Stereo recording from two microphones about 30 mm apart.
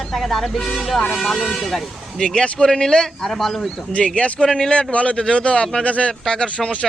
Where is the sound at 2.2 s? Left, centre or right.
Left.